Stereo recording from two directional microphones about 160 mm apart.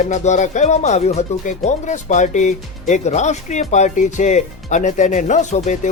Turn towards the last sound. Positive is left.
turn(degrees=45)  # may be behind; listen again after turning